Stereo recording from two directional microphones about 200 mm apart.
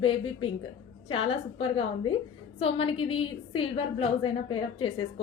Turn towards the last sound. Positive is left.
turn(degrees=25)  # may be behind; listen again after turning